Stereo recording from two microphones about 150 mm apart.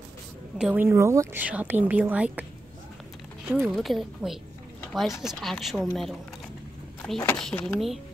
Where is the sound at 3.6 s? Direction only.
Centre (ahead or behind).